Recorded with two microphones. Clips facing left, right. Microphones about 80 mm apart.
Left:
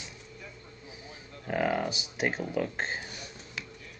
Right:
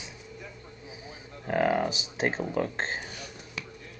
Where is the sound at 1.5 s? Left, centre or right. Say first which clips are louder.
Right 3 dB; centre.